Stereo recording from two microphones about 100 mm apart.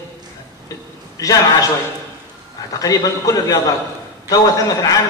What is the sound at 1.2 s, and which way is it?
Speech, 35° left (ahead or behind).